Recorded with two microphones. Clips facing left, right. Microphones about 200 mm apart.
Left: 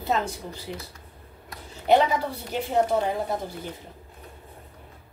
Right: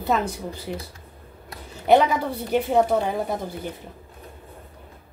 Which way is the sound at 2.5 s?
55° right (ahead or behind).